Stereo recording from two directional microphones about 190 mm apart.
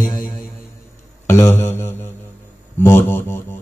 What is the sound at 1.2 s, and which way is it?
Mantra, 15° left (ahead or behind).